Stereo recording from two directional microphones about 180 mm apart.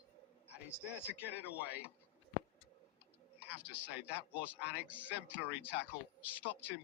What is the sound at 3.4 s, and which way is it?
Speech, 10° right (ahead or behind).